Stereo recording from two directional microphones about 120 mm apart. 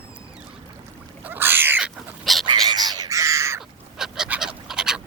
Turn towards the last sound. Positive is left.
turn(degrees=-5)  # may be behind; listen again after turning